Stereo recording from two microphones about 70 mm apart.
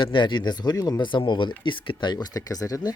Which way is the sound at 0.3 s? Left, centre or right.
Left.